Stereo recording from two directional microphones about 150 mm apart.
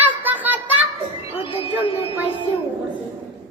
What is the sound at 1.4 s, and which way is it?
Speech, 40° left (ahead or behind).